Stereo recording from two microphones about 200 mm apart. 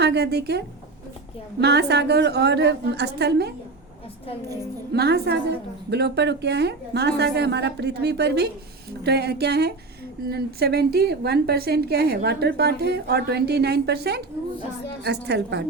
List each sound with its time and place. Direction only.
0.0 s a woman's voice: 55° right (ahead or behind)
1.6 s a woman's voice: 55° right (ahead or behind)
4.9 s a woman's voice: 55° right (ahead or behind)